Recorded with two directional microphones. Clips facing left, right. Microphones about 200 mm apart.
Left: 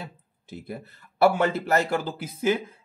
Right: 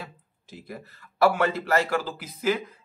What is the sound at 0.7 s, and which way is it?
Speech, 25° left (ahead or behind).